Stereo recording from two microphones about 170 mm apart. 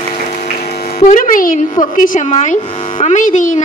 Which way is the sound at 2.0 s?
45° left (ahead or behind).